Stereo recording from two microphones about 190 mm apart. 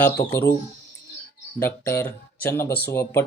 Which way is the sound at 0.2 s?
15° left (ahead or behind).